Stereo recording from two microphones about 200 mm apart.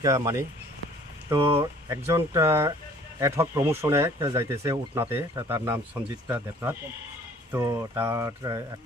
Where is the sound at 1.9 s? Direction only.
15° right (ahead or behind).